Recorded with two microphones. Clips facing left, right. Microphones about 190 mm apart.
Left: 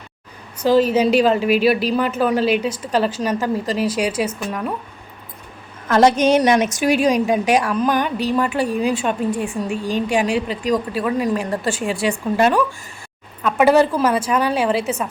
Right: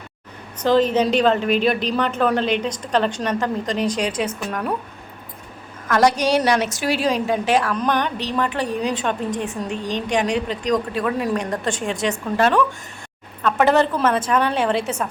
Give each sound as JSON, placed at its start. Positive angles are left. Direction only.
{"t": 0.6, "sound": "a woman's voice", "side_deg": 10}
{"t": 5.9, "sound": "a woman's voice", "side_deg": 25}